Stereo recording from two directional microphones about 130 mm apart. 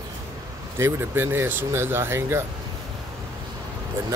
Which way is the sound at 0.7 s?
20° right (ahead or behind).